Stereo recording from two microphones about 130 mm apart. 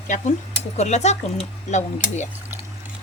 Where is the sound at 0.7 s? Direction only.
60° left (ahead or behind).